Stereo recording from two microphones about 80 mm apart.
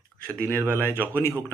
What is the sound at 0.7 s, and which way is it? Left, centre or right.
Speech, left.